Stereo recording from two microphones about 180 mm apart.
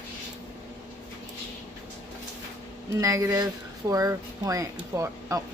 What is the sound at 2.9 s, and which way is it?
Speech, 20° right (ahead or behind).